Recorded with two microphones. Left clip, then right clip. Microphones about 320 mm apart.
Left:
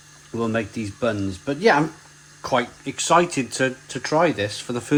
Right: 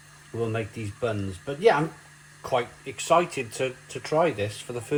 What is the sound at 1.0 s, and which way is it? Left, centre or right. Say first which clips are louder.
Speech: left 5 dB; left.